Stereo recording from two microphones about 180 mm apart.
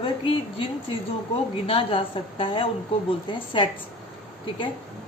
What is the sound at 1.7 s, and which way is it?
A woman's voice, 30° left (ahead or behind).